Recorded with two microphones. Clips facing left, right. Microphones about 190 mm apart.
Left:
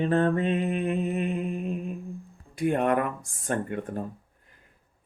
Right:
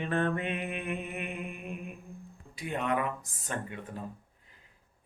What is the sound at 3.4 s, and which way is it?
Female singing, 55° left (ahead or behind).